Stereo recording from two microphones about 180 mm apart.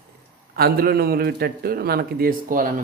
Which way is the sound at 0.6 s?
60° right (ahead or behind).